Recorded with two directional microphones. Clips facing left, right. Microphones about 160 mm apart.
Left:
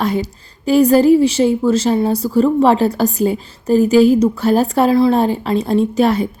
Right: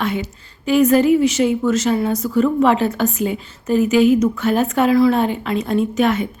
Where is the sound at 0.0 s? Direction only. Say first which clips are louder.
Left 4 dB; 35° left (ahead or behind).